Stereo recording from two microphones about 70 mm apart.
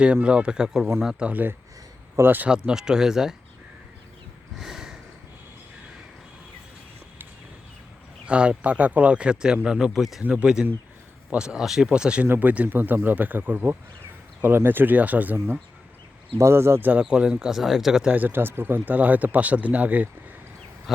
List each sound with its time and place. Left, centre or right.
0.0 s speech: centre
1.2 s speech: right
2.5 s speech: centre
4.5 s a sound: centre
8.3 s speech: centre
10.2 s speech: centre
12.2 s speech: right
16.4 s speech: right
16.9 s speech: centre
18.1 s speech: right